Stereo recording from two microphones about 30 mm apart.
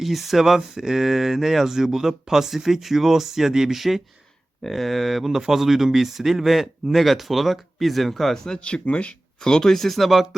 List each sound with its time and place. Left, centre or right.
0.0 s speech: centre
8.6 s speech: left
9.4 s speech: left
9.7 s speech: centre